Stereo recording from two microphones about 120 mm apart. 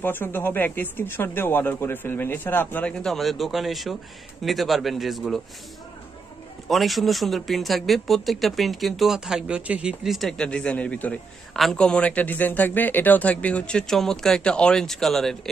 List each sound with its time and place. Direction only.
0.0 s a man's voice: 15° left (ahead or behind); by 5.4 s centre (ahead or behind)
6.7 s a man's voice: centre (ahead or behind)